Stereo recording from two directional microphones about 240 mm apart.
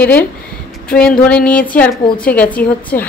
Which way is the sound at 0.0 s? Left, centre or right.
Centre.